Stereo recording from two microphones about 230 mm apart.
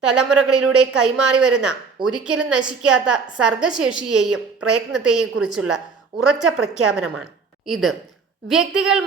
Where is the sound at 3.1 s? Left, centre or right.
Centre.